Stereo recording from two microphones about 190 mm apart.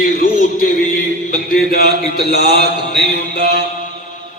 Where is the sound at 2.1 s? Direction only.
55° left (ahead or behind).